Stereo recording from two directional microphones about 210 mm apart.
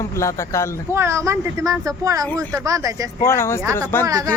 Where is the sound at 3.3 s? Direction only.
10° left (ahead or behind).